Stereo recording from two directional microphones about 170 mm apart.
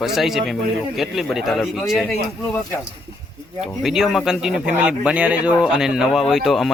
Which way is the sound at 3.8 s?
Centre (ahead or behind).